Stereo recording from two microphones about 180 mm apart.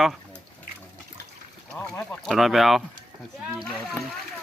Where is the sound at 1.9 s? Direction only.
10° left (ahead or behind).